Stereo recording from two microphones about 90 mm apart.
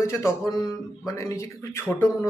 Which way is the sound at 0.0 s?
30° left (ahead or behind).